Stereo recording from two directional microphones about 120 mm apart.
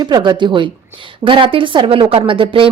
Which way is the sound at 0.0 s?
40° right (ahead or behind).